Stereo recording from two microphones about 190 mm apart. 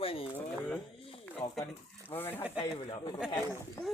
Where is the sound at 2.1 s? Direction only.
10° left (ahead or behind).